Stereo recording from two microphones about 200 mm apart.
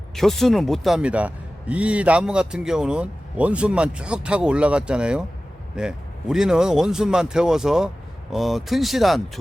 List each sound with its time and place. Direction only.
0.2 s a man's voice: centre (ahead or behind)